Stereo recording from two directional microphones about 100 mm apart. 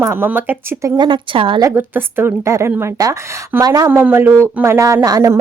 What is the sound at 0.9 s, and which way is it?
Speech, 55° right (ahead or behind).